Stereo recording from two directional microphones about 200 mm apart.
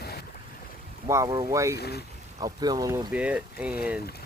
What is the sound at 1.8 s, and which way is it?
Speech, 55° left (ahead or behind).